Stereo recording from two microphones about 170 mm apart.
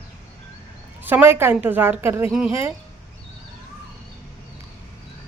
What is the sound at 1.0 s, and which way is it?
Speech, 10° right (ahead or behind).